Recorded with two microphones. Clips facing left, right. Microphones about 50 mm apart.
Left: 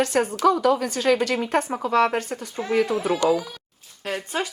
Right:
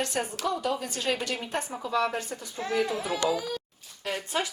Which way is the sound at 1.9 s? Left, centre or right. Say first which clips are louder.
Left 7 dB; left.